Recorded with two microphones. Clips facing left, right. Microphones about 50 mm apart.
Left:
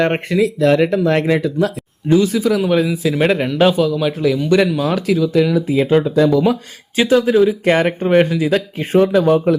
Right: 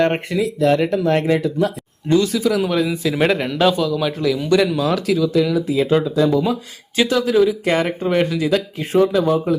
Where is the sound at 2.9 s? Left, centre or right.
Centre; by 9.3 s left.